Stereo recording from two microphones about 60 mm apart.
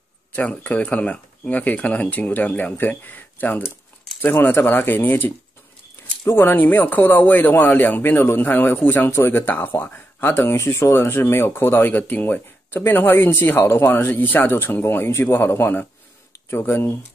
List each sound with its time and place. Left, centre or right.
0.4 s speech: left
11.9 s speech: left
13.6 s a man's voice: left
14.1 s a man's voice: left